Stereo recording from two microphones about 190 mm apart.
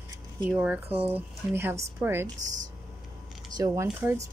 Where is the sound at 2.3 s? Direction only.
40° right (ahead or behind).